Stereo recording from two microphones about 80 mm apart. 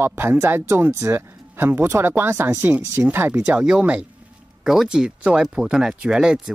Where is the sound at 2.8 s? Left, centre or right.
Right.